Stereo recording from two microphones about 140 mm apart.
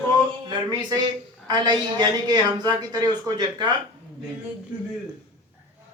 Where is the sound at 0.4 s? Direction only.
30° right (ahead or behind).